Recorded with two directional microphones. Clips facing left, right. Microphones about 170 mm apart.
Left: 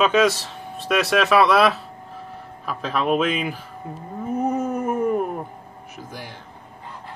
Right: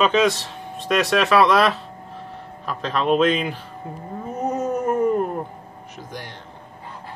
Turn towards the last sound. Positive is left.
turn(degrees=5)  # may be behind; listen again after turning